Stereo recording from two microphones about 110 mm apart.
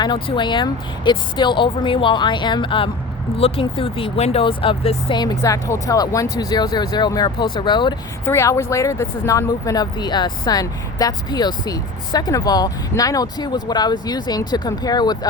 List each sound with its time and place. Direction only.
0.0 s speech: 45° left (ahead or behind)
3.3 s speech: 60° left (ahead or behind)
5.1 s speech: 40° left (ahead or behind)
8.2 s speech: 25° left (ahead or behind)